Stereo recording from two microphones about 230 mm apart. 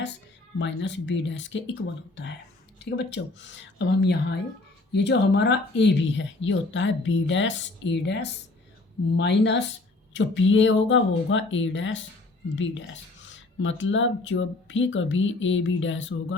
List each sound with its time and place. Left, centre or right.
0.6 s speech: left